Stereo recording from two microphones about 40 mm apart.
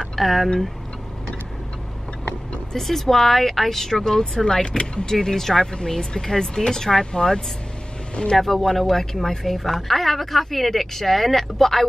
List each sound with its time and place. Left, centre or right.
0.1 s speech: centre
2.7 s speech: centre
8.4 s a woman's voice: centre